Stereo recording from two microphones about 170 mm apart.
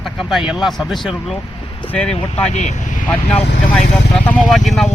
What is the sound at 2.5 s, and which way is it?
Speech, 45° left (ahead or behind).